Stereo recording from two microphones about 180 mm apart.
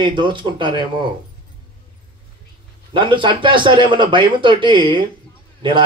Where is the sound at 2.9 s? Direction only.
25° right (ahead or behind).